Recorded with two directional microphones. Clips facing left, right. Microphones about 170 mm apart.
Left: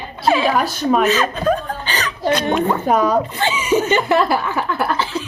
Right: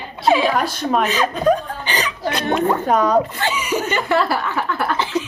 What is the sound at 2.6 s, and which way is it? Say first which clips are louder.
Speech: left 1 dB; 5° left (ahead or behind).